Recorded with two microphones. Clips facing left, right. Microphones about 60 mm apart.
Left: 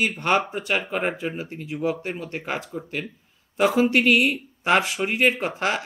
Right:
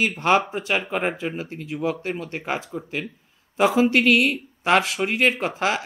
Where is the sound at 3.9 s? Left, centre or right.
Centre.